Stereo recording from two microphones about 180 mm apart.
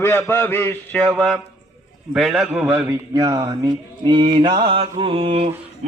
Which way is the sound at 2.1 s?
Centre (ahead or behind).